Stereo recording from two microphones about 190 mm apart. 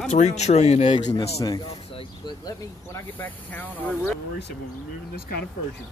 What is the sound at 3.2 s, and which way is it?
Speech, 10° left (ahead or behind).